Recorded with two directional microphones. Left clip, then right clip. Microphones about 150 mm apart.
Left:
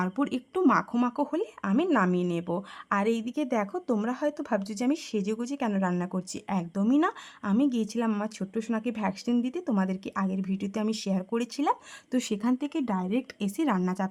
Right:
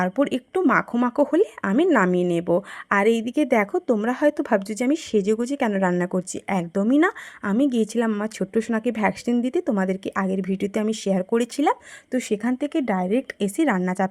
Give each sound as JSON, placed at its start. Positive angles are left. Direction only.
{"t": 0.0, "sound": "speech", "side_deg": -25}
{"t": 1.7, "sound": "speech", "side_deg": -20}